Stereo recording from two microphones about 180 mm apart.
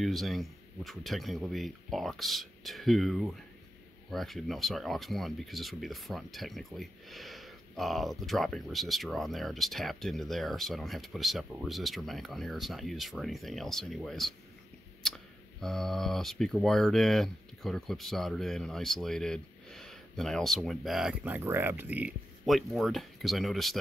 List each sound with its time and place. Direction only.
0.0 s speech: centre (ahead or behind)